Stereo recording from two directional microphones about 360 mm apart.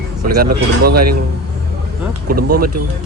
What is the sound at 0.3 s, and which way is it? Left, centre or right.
Speech, right.